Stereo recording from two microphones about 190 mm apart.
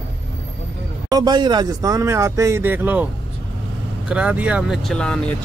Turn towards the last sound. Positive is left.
turn(degrees=5)  # may be behind; listen again after turning